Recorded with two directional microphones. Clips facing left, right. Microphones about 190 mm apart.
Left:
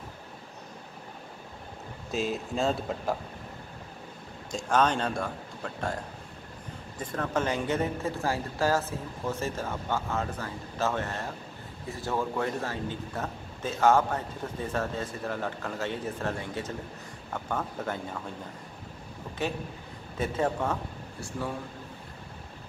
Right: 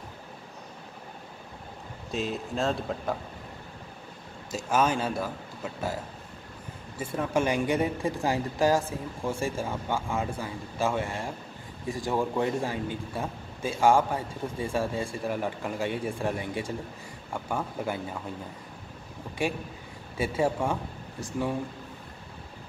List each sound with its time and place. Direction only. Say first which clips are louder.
2.0 s a man's voice: left 1 dB; centre (ahead or behind)
4.5 s a man's voice: even; 5° right (ahead or behind)
7.0 s a man's voice: right 3 dB; 10° right (ahead or behind)
19.4 s a man's voice: right 2 dB; 10° right (ahead or behind)